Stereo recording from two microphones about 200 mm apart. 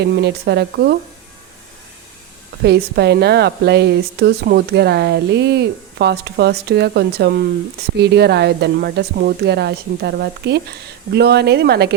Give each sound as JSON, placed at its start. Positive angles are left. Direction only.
{"t": 0.0, "sound": "speech", "side_deg": -55}
{"t": 2.6, "sound": "speech", "side_deg": -55}